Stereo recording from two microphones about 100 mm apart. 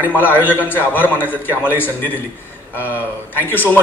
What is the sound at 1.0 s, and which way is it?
Speech, 20° left (ahead or behind).